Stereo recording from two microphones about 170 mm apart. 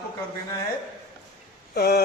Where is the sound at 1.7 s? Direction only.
65° left (ahead or behind).